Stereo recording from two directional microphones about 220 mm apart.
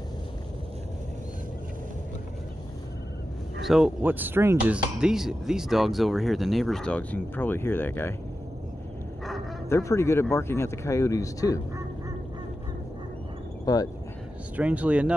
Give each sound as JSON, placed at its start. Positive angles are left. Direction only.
{"t": 3.6, "sound": "speech", "side_deg": -5}
{"t": 9.7, "sound": "speech", "side_deg": 15}
{"t": 13.7, "sound": "speech", "side_deg": 15}
{"t": 14.6, "sound": "speech", "side_deg": -5}